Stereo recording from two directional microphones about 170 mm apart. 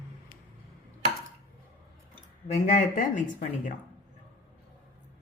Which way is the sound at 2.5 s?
45° left (ahead or behind).